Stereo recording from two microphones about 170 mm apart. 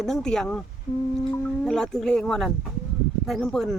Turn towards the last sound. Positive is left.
turn(degrees=0)  # may be behind; listen again after turning